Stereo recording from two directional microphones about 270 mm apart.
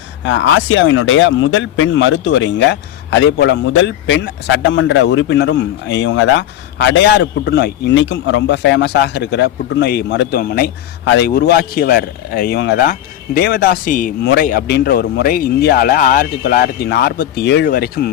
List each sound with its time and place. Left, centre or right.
0.3 s speech: left